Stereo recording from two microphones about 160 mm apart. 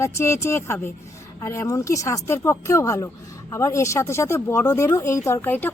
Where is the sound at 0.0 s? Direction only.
15° left (ahead or behind).